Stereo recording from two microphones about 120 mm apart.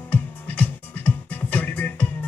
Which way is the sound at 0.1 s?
15° left (ahead or behind).